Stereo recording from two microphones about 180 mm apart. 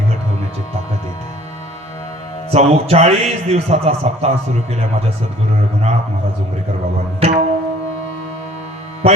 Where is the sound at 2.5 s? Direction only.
35° right (ahead or behind).